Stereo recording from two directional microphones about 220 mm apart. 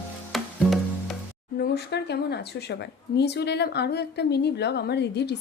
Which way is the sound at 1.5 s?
45° left (ahead or behind).